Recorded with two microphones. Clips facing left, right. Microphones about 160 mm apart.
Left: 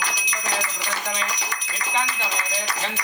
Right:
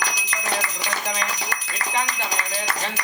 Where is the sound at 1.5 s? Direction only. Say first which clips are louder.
Right 2 dB; 65° right (ahead or behind).